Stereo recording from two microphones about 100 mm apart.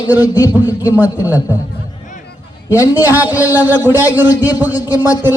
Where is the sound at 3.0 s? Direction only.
15° right (ahead or behind).